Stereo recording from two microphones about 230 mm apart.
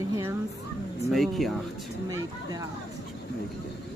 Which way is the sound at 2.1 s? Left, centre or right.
Centre.